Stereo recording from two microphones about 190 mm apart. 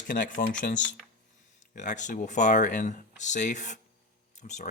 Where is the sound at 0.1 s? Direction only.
45° left (ahead or behind).